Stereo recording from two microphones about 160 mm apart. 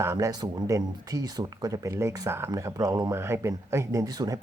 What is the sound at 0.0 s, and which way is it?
Speech, 15° right (ahead or behind).